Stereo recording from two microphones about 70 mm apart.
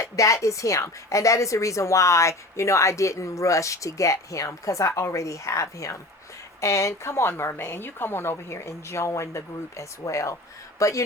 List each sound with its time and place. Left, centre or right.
0.0 s a woman's voice: left